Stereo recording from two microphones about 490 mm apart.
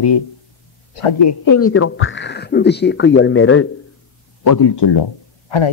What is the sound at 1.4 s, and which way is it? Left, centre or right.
Speech, left.